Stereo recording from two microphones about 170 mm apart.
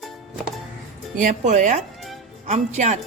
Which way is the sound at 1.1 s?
50° right (ahead or behind).